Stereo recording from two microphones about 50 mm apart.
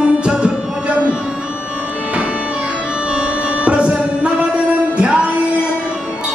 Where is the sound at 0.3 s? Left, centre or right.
Centre.